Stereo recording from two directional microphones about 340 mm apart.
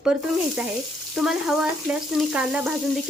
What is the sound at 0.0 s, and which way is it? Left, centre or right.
Frying, centre.